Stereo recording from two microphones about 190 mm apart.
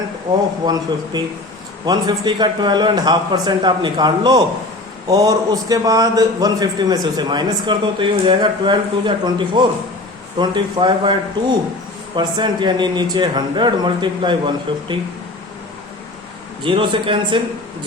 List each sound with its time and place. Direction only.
0.6 s a man's voice: 20° right (ahead or behind)
16.6 s a man's voice: 25° right (ahead or behind)